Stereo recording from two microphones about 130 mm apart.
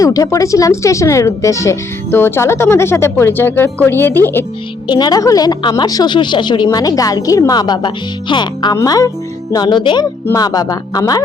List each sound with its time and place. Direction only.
0.0 s speech: 25° left (ahead or behind)
4.9 s a woman's voice: 30° left (ahead or behind)